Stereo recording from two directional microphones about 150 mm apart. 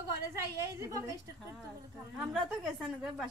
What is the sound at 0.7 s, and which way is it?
Speech, 20° right (ahead or behind).